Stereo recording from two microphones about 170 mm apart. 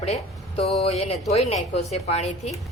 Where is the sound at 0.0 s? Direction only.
35° left (ahead or behind).